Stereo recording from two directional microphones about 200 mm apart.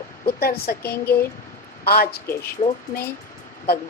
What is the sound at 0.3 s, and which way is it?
Speech, 50° left (ahead or behind).